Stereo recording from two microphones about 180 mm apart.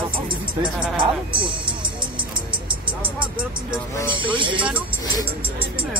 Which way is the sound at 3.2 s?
5° right (ahead or behind).